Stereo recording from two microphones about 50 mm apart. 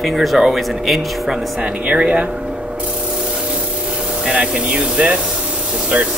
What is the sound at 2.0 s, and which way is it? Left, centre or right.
Speech, right.